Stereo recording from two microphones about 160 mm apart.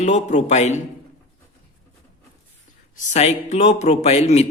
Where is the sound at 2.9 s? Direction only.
45° left (ahead or behind).